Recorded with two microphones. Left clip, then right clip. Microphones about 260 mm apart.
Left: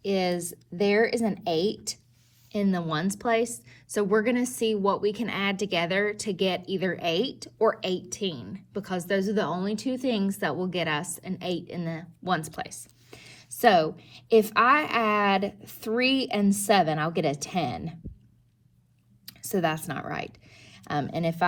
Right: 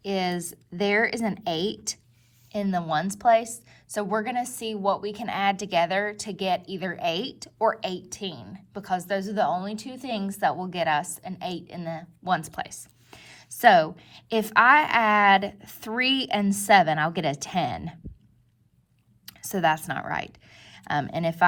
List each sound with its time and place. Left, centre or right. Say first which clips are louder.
0.0 s a woman's voice: left 1 dB; right
19.2 s speech: right 3 dB; right